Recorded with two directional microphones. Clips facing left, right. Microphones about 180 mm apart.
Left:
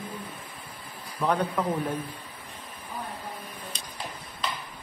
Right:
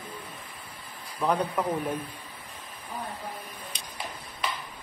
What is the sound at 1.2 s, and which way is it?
Speech, 10° right (ahead or behind).